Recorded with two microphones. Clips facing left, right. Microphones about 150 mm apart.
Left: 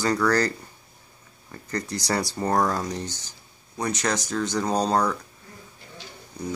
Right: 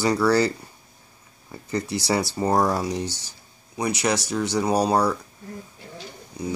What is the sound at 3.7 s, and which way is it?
Speech, 10° right (ahead or behind).